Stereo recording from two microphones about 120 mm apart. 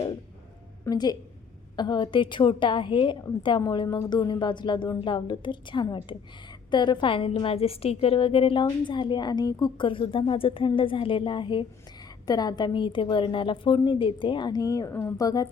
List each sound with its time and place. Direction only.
0.9 s a woman's voice: 35° left (ahead or behind)